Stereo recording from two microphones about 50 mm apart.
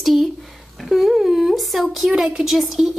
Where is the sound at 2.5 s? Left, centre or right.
Centre.